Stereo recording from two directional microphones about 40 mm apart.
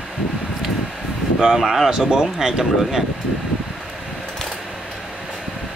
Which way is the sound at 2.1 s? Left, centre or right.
Centre.